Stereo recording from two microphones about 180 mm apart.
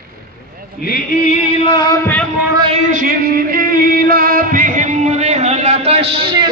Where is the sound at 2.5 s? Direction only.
25° right (ahead or behind).